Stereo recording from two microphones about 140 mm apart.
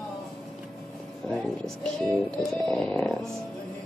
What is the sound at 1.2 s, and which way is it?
Speech, centre (ahead or behind).